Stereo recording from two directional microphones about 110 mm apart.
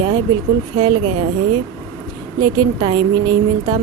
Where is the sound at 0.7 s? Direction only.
55° right (ahead or behind).